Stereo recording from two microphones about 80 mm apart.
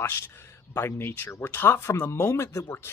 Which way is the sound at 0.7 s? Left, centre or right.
Left.